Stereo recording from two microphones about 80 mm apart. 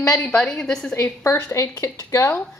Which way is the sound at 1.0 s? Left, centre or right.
Left.